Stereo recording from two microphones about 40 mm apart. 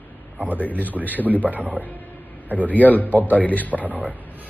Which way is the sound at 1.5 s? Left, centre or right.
Right.